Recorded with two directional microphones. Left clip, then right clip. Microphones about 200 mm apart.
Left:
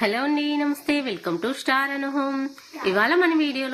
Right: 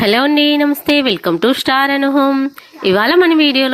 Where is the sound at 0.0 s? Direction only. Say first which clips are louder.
Right 11 dB; 45° right (ahead or behind).